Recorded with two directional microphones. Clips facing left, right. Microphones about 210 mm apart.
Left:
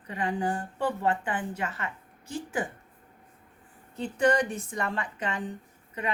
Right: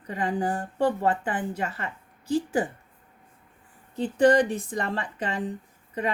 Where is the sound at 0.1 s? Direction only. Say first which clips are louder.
Right 2 dB; 35° right (ahead or behind).